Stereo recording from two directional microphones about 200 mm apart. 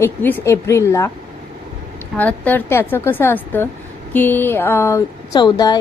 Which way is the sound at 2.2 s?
10° left (ahead or behind).